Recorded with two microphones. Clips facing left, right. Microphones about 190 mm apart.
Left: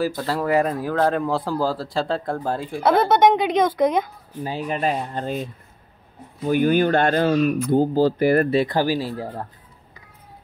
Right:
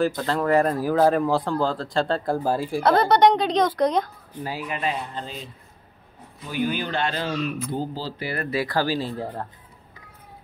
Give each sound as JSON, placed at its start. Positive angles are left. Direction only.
{"t": 0.0, "sound": "speech", "side_deg": 5}
{"t": 2.8, "sound": "speech", "side_deg": 5}
{"t": 4.5, "sound": "speech", "side_deg": 25}
{"t": 4.7, "sound": "speech", "side_deg": 45}
{"t": 8.5, "sound": "speech", "side_deg": 20}